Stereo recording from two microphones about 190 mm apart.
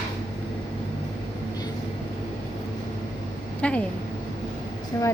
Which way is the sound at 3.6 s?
5° left (ahead or behind).